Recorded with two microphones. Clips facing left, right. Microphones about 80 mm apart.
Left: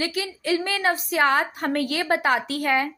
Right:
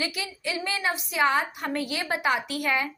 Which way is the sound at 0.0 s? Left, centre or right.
Left.